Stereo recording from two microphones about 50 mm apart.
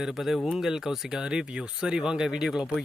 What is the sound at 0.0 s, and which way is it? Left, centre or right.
Speech, centre.